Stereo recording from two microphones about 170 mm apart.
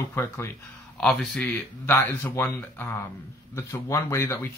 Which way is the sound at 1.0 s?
5° left (ahead or behind).